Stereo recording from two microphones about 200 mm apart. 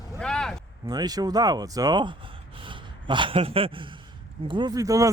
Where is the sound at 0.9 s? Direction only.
20° right (ahead or behind).